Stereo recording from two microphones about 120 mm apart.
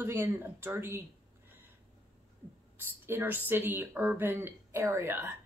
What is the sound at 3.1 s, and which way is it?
A woman's voice, 15° right (ahead or behind).